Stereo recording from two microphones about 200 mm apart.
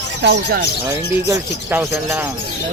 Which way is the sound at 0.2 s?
60° right (ahead or behind).